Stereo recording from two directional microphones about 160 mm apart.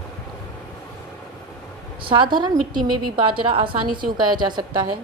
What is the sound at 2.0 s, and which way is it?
A woman's voice, 30° right (ahead or behind).